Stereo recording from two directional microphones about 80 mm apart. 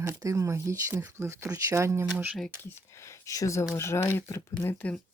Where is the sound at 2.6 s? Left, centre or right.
Left.